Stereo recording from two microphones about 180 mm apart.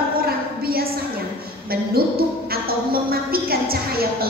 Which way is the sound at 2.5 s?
55° right (ahead or behind).